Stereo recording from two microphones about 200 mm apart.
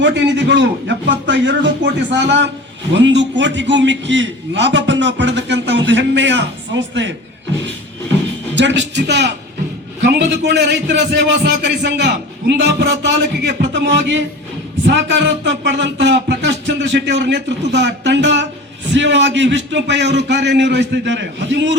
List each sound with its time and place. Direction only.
0.0 s a man's voice: 60° right (ahead or behind)
8.5 s a man's voice: 60° right (ahead or behind)